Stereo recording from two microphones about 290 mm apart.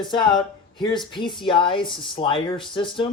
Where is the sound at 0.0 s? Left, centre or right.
Centre.